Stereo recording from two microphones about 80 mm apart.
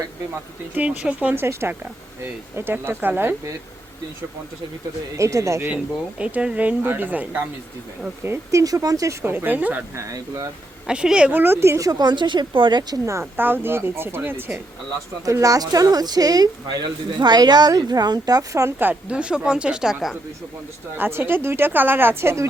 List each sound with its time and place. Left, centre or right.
0.8 s speech: centre
5.1 s speech: right
5.6 s speech: centre
8.2 s speech: right
9.2 s speech: right
9.9 s speech: right
10.8 s speech: centre; by 11.8 s right
11.8 s speech: right
13.1 s speech: right
15.2 s speech: right
19.0 s speech: centre
21.0 s speech: right